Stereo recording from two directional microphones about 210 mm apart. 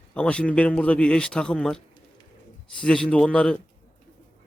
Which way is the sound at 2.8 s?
5° left (ahead or behind).